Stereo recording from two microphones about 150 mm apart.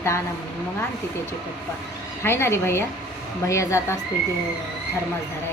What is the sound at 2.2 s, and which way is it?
A woman's voice, 15° left (ahead or behind).